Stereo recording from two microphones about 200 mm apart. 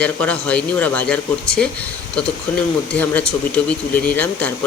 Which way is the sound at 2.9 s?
5° left (ahead or behind).